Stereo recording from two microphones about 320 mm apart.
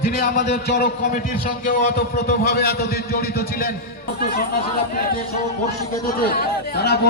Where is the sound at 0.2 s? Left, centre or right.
Left.